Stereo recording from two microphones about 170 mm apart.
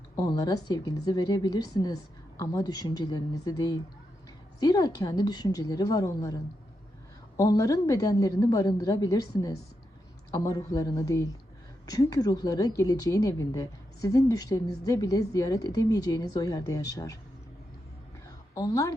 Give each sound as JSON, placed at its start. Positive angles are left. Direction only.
{"t": 0.2, "sound": "a woman's voice", "side_deg": 20}
{"t": 18.5, "sound": "a woman's voice", "side_deg": 20}